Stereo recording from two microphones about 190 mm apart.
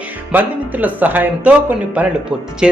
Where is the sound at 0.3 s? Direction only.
10° right (ahead or behind).